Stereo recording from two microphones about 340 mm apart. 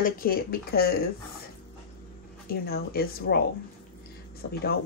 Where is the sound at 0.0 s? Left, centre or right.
Left.